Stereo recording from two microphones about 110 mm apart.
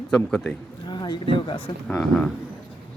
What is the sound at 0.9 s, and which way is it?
Speech, 40° left (ahead or behind).